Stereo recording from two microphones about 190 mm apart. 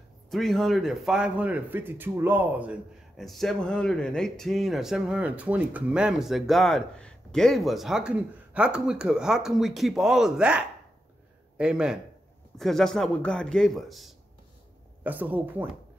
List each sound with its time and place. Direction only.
0.3 s a man's voice: centre (ahead or behind)